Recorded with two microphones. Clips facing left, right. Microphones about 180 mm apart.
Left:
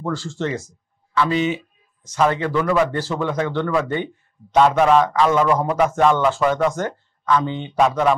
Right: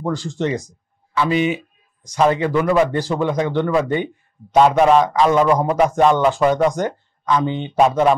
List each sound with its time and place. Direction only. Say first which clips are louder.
0.0 s speech: right 3 dB; 15° right (ahead or behind)